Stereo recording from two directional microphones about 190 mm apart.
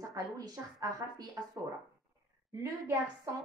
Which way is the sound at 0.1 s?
20° right (ahead or behind).